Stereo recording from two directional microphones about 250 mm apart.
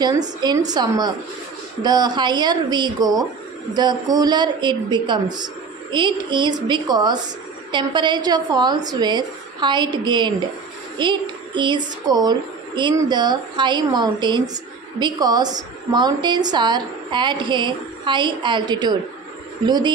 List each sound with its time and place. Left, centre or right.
0.7 s a woman's voice: centre